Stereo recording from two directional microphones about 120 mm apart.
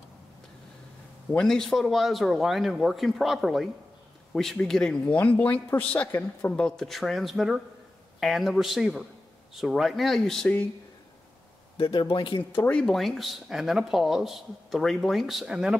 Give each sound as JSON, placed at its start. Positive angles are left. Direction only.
{"t": 1.3, "sound": "speech", "side_deg": 5}
{"t": 11.7, "sound": "a man's voice", "side_deg": 45}
{"t": 12.5, "sound": "speech", "side_deg": 10}